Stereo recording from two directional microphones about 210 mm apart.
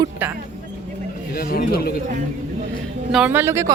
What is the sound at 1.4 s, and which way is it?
Speech, 45° left (ahead or behind).